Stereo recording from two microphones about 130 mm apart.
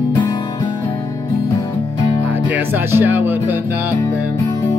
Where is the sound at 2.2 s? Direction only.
15° right (ahead or behind).